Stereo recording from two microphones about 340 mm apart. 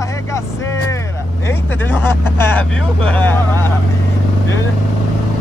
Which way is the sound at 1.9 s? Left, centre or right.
Centre.